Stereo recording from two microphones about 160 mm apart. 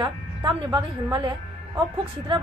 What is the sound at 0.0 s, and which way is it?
A woman's voice, 25° right (ahead or behind).